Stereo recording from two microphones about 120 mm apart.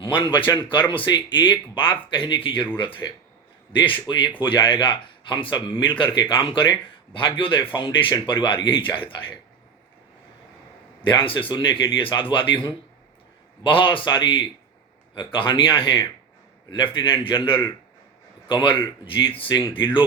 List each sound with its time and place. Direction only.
0.0 s a man's voice: 45° left (ahead or behind)
4.1 s a man's voice: 45° left (ahead or behind)
11.1 s a man's voice: 45° left (ahead or behind)
13.7 s a man's voice: 45° left (ahead or behind)